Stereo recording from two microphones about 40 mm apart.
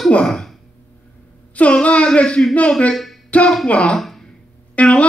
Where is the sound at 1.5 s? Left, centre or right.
Left.